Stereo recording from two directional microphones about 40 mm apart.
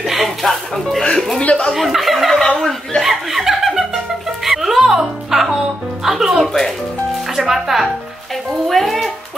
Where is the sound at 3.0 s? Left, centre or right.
Centre.